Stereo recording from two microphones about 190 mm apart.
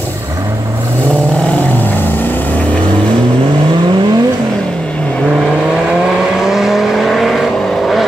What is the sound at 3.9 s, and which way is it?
Vehicle, 20° right (ahead or behind).